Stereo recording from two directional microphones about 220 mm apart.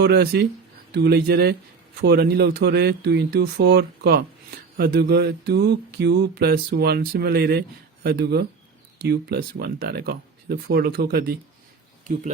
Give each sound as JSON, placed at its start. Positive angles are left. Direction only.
{"t": 0.0, "sound": "speech", "side_deg": -45}